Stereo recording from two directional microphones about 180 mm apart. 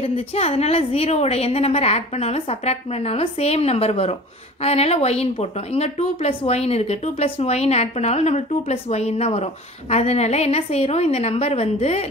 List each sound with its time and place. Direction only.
0.0 s speech: 35° left (ahead or behind)